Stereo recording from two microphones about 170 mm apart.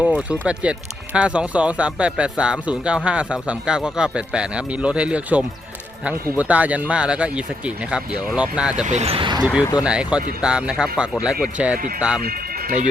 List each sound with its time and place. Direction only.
0.0 s speech: 5° right (ahead or behind)
8.8 s speech: 45° right (ahead or behind)
9.4 s speech: 5° right (ahead or behind)
12.2 s speech: 55° right (ahead or behind)